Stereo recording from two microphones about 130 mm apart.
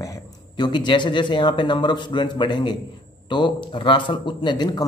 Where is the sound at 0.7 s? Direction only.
35° left (ahead or behind).